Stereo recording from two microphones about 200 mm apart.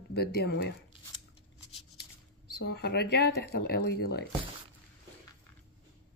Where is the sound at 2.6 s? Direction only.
55° left (ahead or behind).